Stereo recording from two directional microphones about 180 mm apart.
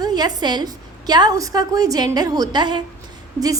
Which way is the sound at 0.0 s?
20° right (ahead or behind).